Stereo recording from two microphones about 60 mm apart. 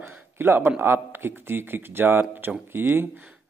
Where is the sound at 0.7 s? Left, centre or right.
Right.